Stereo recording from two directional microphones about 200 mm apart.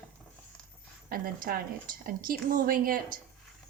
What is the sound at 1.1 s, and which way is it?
Speech, 45° right (ahead or behind).